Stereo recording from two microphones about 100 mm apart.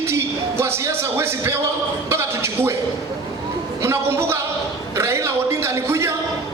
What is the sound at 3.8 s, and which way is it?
A man's voice, 25° right (ahead or behind).